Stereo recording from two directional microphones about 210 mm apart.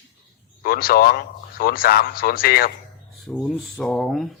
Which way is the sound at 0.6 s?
45° left (ahead or behind).